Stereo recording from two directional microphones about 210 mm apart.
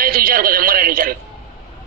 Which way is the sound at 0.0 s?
45° right (ahead or behind).